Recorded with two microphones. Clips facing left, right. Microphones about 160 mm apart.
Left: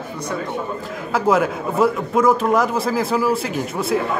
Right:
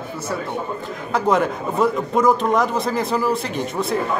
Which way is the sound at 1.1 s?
5° left (ahead or behind).